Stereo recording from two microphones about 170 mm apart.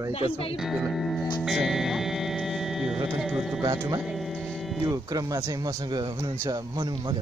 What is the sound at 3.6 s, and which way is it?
Speech, 20° right (ahead or behind).